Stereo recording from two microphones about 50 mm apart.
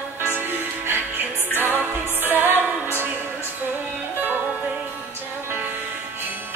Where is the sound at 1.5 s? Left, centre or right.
Right.